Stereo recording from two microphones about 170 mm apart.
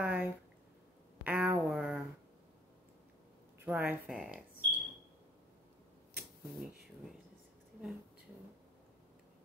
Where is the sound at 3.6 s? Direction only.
10° right (ahead or behind).